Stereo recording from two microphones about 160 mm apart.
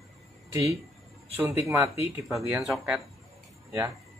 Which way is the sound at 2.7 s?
Centre (ahead or behind).